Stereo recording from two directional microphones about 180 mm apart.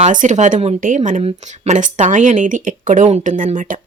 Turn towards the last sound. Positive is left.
turn(degrees=-45)  # may be behind; listen again after turning